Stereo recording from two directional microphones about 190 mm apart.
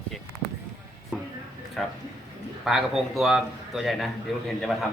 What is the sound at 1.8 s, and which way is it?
A man's voice, centre (ahead or behind).